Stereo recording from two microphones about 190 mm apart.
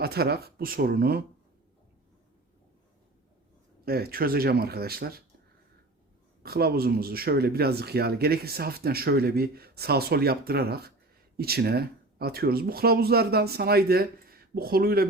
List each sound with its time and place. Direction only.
0.0 s speech: 55° right (ahead or behind)
3.8 s speech: 55° right (ahead or behind)
6.4 s speech: 55° right (ahead or behind)